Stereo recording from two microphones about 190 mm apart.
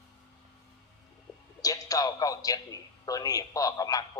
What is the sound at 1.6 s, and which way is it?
A man's voice, 20° left (ahead or behind).